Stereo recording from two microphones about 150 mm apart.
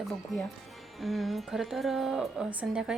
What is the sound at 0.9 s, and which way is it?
Speech, centre (ahead or behind).